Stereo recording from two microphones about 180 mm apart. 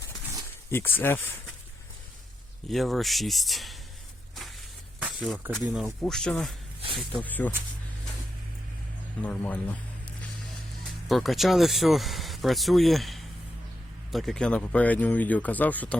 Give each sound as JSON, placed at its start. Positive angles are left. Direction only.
{"t": 0.7, "sound": "speech", "side_deg": 10}
{"t": 2.6, "sound": "speech", "side_deg": 0}
{"t": 4.9, "sound": "speech", "side_deg": -5}
{"t": 9.2, "sound": "speech", "side_deg": 10}